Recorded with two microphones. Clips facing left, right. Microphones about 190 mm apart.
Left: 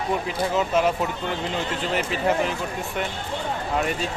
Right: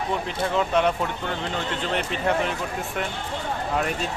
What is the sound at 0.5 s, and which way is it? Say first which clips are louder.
Speech: even; 5° left (ahead or behind).